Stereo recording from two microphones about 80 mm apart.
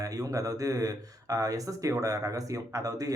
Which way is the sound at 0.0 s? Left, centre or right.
Right.